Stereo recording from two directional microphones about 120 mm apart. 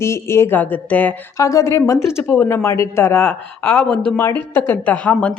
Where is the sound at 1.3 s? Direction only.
25° left (ahead or behind).